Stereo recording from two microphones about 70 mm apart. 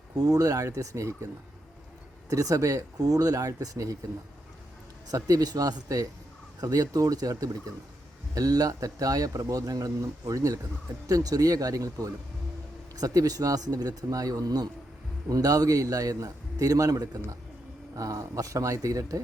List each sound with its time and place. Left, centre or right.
0.2 s speech: right
2.3 s speech: right
5.1 s speech: right